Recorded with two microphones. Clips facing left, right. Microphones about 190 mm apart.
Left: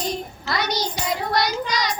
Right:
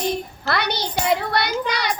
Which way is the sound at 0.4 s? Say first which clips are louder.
Even; 60° right (ahead or behind).